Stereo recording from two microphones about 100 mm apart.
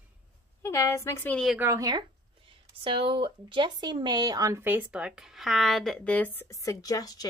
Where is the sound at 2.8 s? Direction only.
60° right (ahead or behind); by 4.6 s 35° right (ahead or behind).